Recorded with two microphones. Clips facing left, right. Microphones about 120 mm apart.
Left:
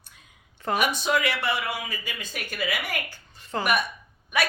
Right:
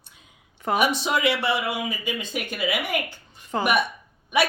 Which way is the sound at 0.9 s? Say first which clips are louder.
Right 2 dB; 25° right (ahead or behind).